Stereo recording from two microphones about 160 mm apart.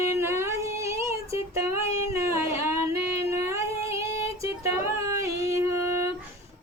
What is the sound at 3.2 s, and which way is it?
Music, 15° right (ahead or behind).